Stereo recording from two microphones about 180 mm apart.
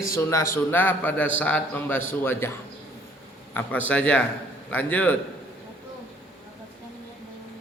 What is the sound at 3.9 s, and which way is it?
Speech, 5° left (ahead or behind).